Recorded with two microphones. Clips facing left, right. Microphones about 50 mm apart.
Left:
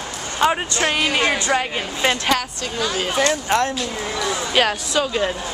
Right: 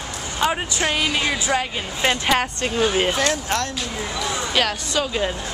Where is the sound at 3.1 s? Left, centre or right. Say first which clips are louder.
Left 2 dB; centre.